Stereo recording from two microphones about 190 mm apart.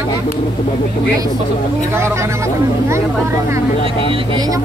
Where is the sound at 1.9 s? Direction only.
15° right (ahead or behind).